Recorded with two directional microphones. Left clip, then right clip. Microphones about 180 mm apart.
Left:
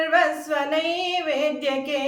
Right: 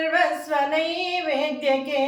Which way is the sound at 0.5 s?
20° left (ahead or behind).